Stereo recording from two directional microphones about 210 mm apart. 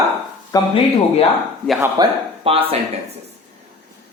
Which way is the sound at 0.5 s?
25° left (ahead or behind).